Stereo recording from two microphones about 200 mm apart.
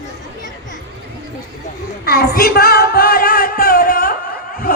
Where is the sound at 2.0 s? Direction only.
50° left (ahead or behind).